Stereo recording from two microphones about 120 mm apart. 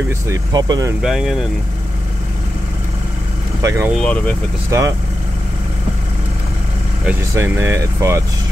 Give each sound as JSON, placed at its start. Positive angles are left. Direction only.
{"t": 0.3, "sound": "speech", "side_deg": -35}
{"t": 1.0, "sound": "speech", "side_deg": -5}
{"t": 3.6, "sound": "speech", "side_deg": -25}
{"t": 3.9, "sound": "speech", "side_deg": 10}
{"t": 4.6, "sound": "speech", "side_deg": -25}
{"t": 7.3, "sound": "speech", "side_deg": -20}